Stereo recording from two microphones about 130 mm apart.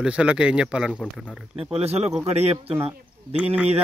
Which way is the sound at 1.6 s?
50° right (ahead or behind).